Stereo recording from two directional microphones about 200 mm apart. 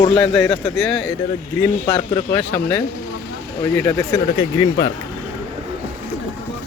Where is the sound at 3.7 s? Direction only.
10° left (ahead or behind).